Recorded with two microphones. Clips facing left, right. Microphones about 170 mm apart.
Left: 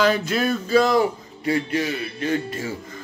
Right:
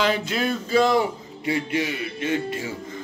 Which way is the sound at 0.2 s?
25° right (ahead or behind).